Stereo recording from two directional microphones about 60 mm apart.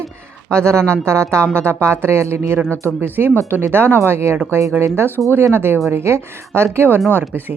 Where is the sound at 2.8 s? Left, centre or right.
Right.